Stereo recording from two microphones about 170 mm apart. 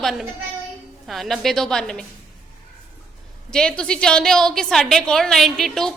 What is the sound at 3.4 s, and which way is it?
A woman's voice, 5° left (ahead or behind).